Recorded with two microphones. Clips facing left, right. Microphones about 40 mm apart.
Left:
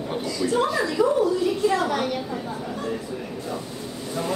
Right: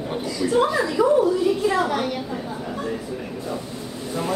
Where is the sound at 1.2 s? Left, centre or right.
Centre.